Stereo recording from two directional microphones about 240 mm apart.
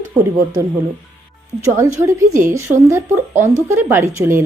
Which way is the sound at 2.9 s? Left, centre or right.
Centre.